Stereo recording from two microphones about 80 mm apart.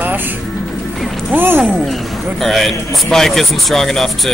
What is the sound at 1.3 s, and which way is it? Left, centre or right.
Speech, right.